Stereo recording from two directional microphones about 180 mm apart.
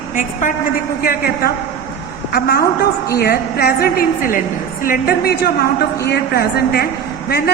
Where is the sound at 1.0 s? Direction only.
55° left (ahead or behind).